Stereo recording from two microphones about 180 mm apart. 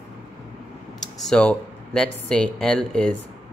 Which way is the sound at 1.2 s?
5° left (ahead or behind).